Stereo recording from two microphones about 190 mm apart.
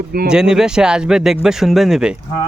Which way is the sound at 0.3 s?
5° right (ahead or behind).